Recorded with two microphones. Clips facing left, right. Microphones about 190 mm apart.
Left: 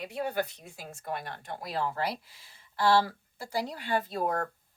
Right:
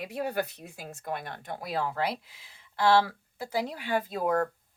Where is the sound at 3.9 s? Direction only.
50° right (ahead or behind).